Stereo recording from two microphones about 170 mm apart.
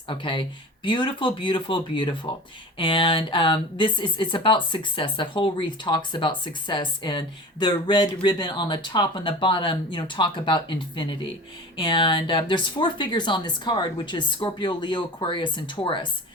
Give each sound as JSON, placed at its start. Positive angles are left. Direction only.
{"t": 0.1, "sound": "speech", "side_deg": 30}